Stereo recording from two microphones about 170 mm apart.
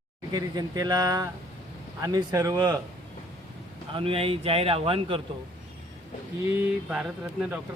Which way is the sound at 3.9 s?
35° right (ahead or behind).